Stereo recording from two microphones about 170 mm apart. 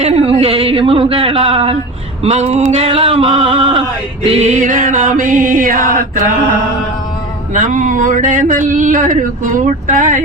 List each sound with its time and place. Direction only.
0.0 s speech: 35° right (ahead or behind)
2.2 s male singing: 40° right (ahead or behind)
7.5 s male singing: 50° right (ahead or behind)